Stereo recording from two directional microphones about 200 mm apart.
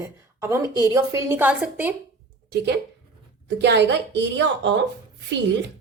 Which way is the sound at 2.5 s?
55° right (ahead or behind).